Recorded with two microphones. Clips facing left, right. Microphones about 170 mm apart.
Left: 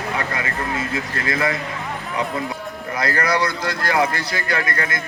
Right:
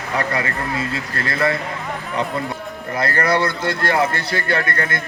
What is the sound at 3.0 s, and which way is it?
A man's voice, 30° right (ahead or behind).